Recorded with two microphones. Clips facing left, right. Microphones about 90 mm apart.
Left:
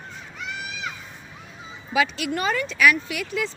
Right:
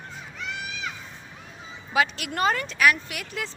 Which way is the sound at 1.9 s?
40° right (ahead or behind).